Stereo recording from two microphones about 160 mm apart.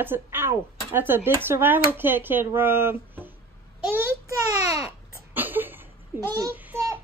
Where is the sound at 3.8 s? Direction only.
15° right (ahead or behind).